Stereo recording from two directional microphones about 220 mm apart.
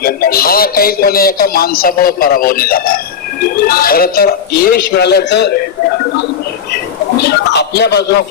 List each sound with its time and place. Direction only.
0.0 s speech: 40° left (ahead or behind)
7.2 s speech: 50° left (ahead or behind)